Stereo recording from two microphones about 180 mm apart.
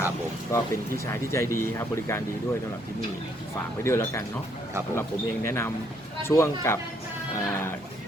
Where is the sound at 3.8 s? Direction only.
15° left (ahead or behind).